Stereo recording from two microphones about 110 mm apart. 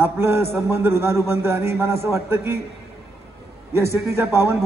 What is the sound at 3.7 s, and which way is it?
Speech, 25° right (ahead or behind).